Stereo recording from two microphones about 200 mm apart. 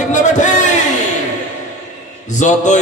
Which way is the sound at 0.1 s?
40° left (ahead or behind).